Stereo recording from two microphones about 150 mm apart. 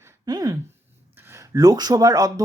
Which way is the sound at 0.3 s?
25° right (ahead or behind).